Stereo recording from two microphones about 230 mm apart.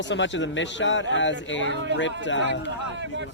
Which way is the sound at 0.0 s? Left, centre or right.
Left.